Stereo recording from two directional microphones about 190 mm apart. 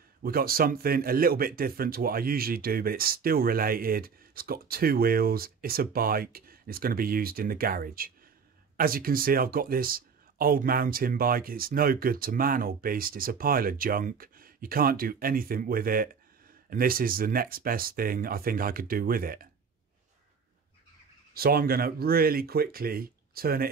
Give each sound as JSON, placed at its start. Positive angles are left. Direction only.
{"t": 0.2, "sound": "speech", "side_deg": -50}
{"t": 21.3, "sound": "speech", "side_deg": -50}